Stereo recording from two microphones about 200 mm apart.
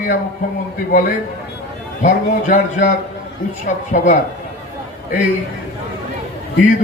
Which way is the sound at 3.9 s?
40° left (ahead or behind).